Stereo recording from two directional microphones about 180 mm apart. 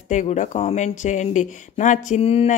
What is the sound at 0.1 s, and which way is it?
Speech, 45° left (ahead or behind).